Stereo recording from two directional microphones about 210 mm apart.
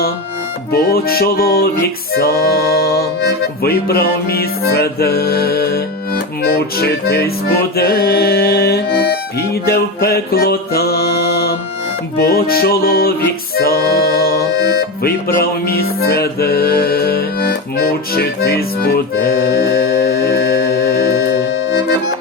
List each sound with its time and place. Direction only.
0.7 s music: 45° left (ahead or behind)